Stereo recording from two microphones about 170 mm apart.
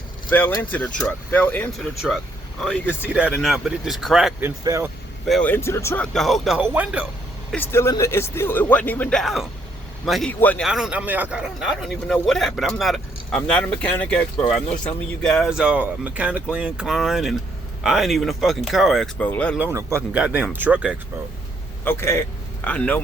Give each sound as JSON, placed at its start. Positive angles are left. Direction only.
{"t": 0.3, "sound": "speech", "side_deg": 10}
{"t": 4.4, "sound": "speech", "side_deg": -15}
{"t": 5.2, "sound": "speech", "side_deg": 5}
{"t": 6.1, "sound": "speech", "side_deg": 0}
{"t": 7.5, "sound": "speech", "side_deg": 15}
{"t": 10.7, "sound": "speech", "side_deg": -5}
{"t": 19.5, "sound": "speech", "side_deg": -15}
{"t": 21.8, "sound": "speech", "side_deg": 15}